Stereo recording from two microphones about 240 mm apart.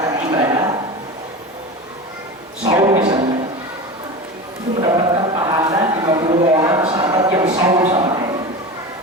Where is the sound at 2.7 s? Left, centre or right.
Centre.